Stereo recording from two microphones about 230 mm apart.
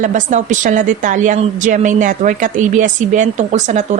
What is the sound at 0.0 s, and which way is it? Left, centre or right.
A woman's voice, right.